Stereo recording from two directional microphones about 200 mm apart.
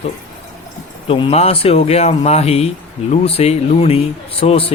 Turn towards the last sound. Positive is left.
turn(degrees=30)  # may be behind; listen again after turning